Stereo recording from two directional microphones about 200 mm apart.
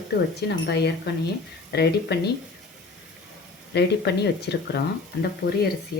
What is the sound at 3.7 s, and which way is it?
Speech, 55° left (ahead or behind).